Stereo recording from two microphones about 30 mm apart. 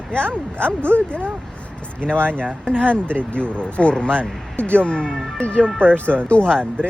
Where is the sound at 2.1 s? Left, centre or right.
Left.